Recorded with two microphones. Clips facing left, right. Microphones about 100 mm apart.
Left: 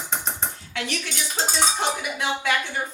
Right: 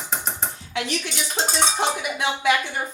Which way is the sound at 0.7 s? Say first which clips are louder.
Right 4 dB; 15° right (ahead or behind).